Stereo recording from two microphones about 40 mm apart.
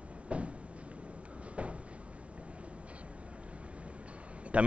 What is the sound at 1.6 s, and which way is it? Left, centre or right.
Cupboard open or close, right.